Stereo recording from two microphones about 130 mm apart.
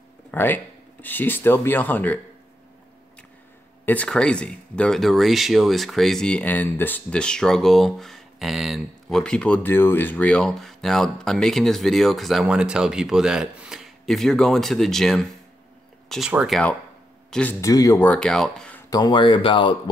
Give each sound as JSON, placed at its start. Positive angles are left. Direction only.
{"t": 0.3, "sound": "speech", "side_deg": 15}
{"t": 3.8, "sound": "speech", "side_deg": 10}
{"t": 17.3, "sound": "speech", "side_deg": 10}
{"t": 17.6, "sound": "speech", "side_deg": 25}
{"t": 18.0, "sound": "speech", "side_deg": 10}
{"t": 18.9, "sound": "speech", "side_deg": 30}